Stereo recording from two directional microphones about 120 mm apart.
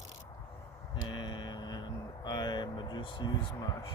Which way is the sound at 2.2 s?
35° left (ahead or behind).